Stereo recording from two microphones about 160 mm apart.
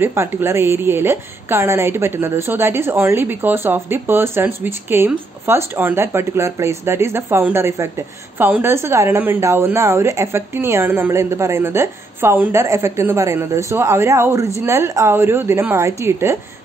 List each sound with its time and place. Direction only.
0.0 s a woman's voice: 15° right (ahead or behind)